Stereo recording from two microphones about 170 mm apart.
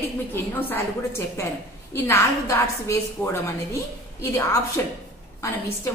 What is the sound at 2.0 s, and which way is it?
A woman's voice, 20° left (ahead or behind).